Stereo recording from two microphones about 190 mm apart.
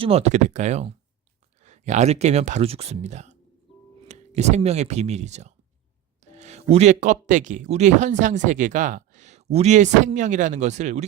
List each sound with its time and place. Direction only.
0.0 s speech: 35° right (ahead or behind)